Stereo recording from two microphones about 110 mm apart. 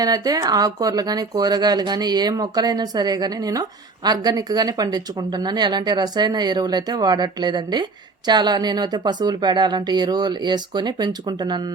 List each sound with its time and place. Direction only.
0.0 s speech: 35° right (ahead or behind)